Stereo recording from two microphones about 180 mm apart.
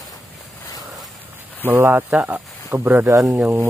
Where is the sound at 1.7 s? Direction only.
10° right (ahead or behind).